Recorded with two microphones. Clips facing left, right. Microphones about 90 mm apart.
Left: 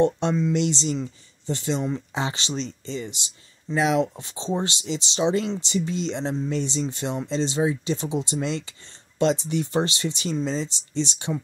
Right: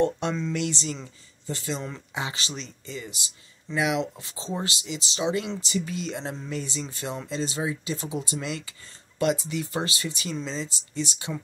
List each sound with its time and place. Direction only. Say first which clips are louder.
0.0 s speech: left 4 dB; 20° left (ahead or behind)